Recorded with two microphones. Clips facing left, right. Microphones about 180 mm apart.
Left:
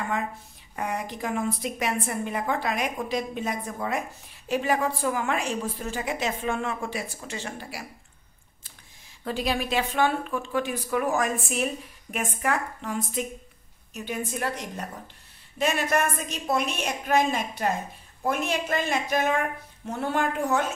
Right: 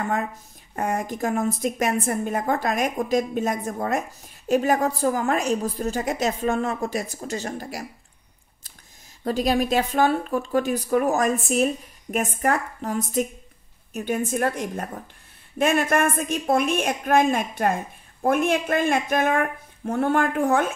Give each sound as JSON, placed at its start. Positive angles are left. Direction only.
{"t": 0.7, "sound": "a woman's voice", "side_deg": -45}
{"t": 9.2, "sound": "a woman's voice", "side_deg": -40}